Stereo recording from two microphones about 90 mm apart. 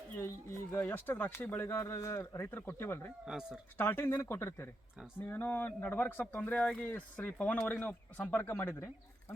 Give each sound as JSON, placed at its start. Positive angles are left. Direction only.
{"t": 0.2, "sound": "speech", "side_deg": 30}
{"t": 3.2, "sound": "speech", "side_deg": -5}
{"t": 3.8, "sound": "speech", "side_deg": 25}
{"t": 5.3, "sound": "speech", "side_deg": 20}
{"t": 6.5, "sound": "speech", "side_deg": 5}
{"t": 6.8, "sound": "speech", "side_deg": 20}